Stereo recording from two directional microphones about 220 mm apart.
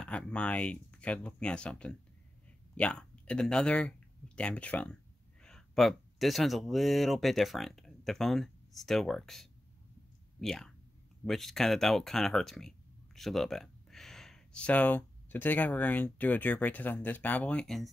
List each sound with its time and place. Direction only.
0.0 s speech: 5° left (ahead or behind)